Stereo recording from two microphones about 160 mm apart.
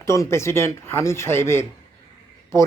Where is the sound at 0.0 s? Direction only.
20° left (ahead or behind).